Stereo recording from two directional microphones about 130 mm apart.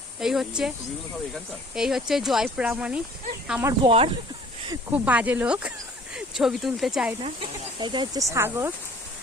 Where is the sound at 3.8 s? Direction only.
45° right (ahead or behind).